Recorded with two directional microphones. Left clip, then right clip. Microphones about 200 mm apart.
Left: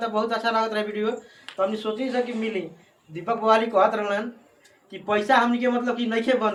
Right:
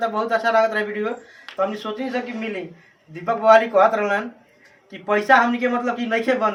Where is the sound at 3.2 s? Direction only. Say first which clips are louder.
Right 6 dB; 20° right (ahead or behind).